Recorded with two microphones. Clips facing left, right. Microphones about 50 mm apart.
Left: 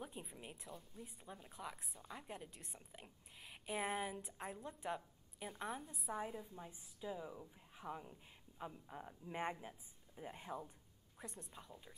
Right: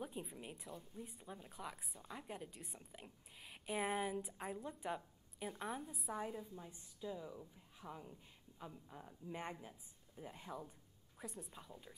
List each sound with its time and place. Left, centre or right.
0.0 s speech: centre
6.5 s speech: centre
11.1 s speech: centre